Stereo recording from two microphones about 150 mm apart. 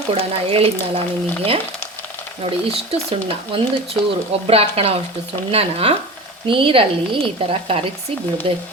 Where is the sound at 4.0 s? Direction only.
15° left (ahead or behind).